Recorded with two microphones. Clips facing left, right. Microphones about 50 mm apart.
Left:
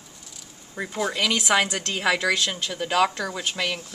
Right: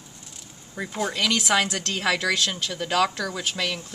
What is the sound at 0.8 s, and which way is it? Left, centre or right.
A woman's voice, centre.